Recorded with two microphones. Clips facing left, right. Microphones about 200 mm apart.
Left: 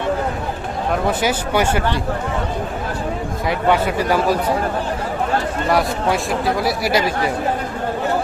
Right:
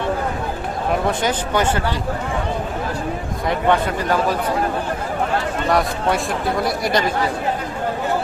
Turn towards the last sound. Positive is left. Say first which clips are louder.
# left 1 dB
turn(degrees=5)  # may be behind; listen again after turning